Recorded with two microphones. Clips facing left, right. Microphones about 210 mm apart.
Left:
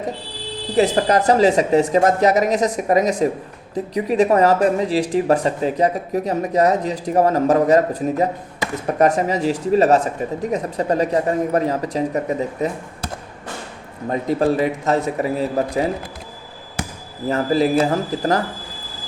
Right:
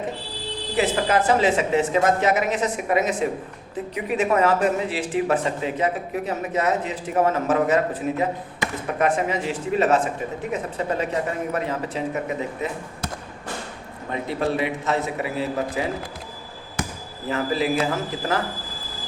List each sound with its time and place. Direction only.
0.8 s speech: 40° left (ahead or behind)
14.1 s speech: 40° left (ahead or behind)
17.2 s speech: 40° left (ahead or behind)